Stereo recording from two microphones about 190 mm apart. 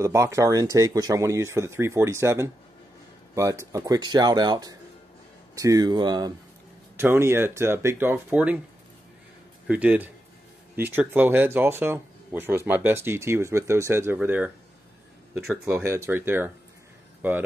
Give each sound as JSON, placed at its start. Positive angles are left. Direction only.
{"t": 0.0, "sound": "speech", "side_deg": -15}
{"t": 9.7, "sound": "speech", "side_deg": -10}